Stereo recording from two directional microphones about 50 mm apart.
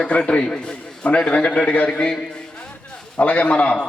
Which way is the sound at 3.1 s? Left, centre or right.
Left.